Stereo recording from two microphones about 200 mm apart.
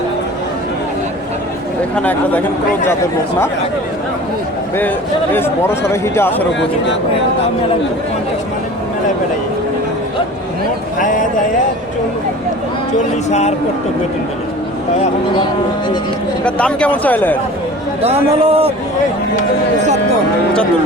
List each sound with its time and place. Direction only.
2.0 s speech: 10° left (ahead or behind)
5.3 s speech: 10° left (ahead or behind)
11.0 s speech: 40° left (ahead or behind)
16.4 s speech: 5° left (ahead or behind)
18.0 s a man's voice: 30° right (ahead or behind)